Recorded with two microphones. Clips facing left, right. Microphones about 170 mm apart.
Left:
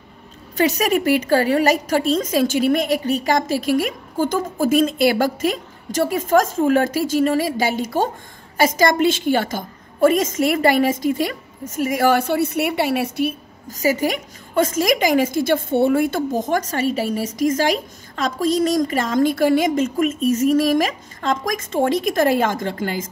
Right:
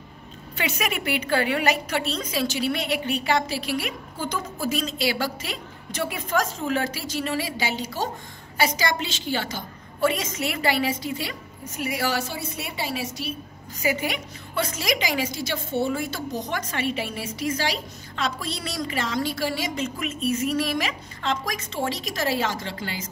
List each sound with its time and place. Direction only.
0.6 s a woman's voice: 40° left (ahead or behind)